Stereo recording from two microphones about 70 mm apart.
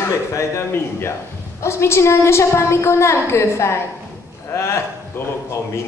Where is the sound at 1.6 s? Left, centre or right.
Left.